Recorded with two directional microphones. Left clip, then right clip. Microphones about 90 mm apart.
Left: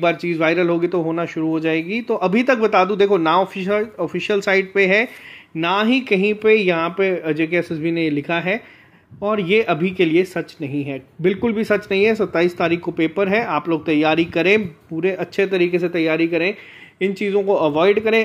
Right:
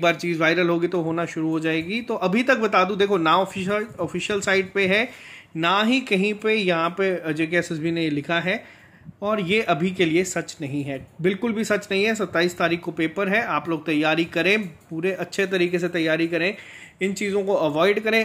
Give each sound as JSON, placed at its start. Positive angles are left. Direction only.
{"t": 0.0, "sound": "a man's voice", "side_deg": 25}
{"t": 5.6, "sound": "a man's voice", "side_deg": 25}
{"t": 11.9, "sound": "a man's voice", "side_deg": 35}